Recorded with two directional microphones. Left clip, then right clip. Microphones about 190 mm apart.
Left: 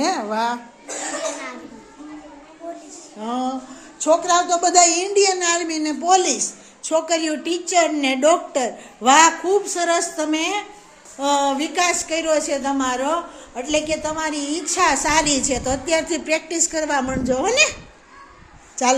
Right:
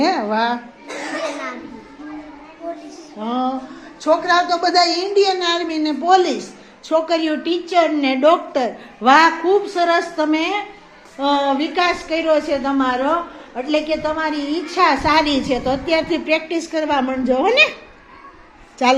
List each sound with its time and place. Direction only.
0.0 s a sound: centre (ahead or behind)
3.2 s a woman's voice: 5° left (ahead or behind)
4.0 s a man's voice: 25° left (ahead or behind)
4.3 s speech: 45° left (ahead or behind)
4.9 s a woman's voice: 20° left (ahead or behind); by 17.7 s centre (ahead or behind)